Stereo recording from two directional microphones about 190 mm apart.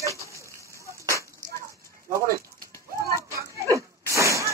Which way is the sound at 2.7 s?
15° left (ahead or behind).